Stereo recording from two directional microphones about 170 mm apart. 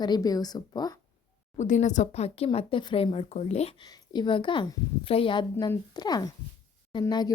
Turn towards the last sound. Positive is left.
turn(degrees=25)  # may be behind; listen again after turning